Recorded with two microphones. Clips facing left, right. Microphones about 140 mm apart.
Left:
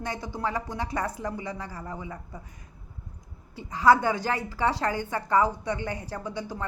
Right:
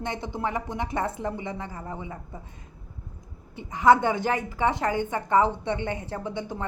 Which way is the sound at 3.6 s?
20° right (ahead or behind).